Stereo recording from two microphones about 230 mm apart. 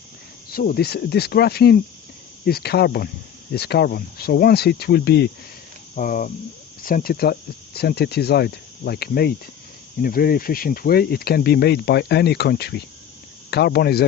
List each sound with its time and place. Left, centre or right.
0.5 s speech: left
6.0 s cricket: left
6.8 s speech: left